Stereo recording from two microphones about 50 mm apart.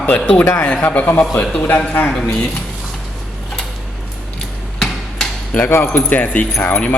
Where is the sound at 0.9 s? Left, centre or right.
Left.